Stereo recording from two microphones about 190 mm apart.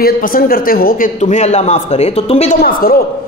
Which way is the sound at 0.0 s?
50° left (ahead or behind).